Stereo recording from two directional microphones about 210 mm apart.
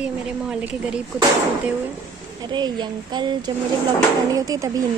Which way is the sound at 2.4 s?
20° right (ahead or behind).